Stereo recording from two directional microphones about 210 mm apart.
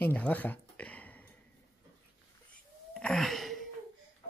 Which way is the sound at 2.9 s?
Centre (ahead or behind).